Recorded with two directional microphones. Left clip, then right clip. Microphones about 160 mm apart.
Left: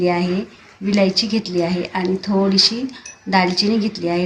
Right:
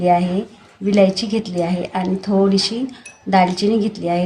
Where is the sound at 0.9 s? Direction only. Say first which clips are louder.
Right 2 dB; 85° right.